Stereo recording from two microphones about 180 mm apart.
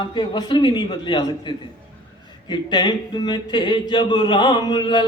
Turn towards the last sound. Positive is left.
turn(degrees=25)  # may be behind; listen again after turning